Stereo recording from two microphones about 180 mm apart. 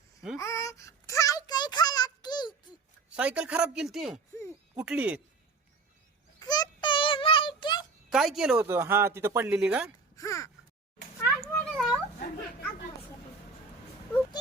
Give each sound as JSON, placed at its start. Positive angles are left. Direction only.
{"t": 0.3, "sound": "a sound", "side_deg": 15}
{"t": 3.2, "sound": "speech", "side_deg": -5}
{"t": 6.4, "sound": "child singing", "side_deg": 20}
{"t": 8.1, "sound": "speech", "side_deg": 0}
{"t": 8.6, "sound": "speech", "side_deg": -15}
{"t": 10.2, "sound": "a sound", "side_deg": 15}
{"t": 11.2, "sound": "cat", "side_deg": 0}